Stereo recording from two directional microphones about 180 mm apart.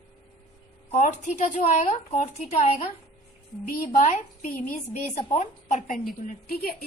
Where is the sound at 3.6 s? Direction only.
45° left (ahead or behind).